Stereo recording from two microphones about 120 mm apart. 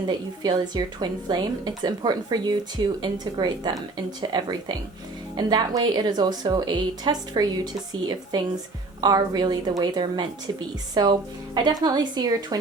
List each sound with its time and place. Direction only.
0.1 s a woman's voice: 35° right (ahead or behind)